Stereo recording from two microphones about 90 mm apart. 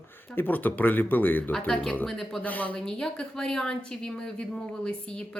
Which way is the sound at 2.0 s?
5° left (ahead or behind).